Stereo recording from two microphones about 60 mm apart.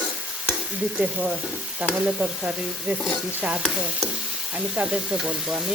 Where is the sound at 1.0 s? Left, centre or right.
Centre.